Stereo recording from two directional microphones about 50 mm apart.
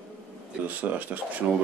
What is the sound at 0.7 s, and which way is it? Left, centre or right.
Speech, right.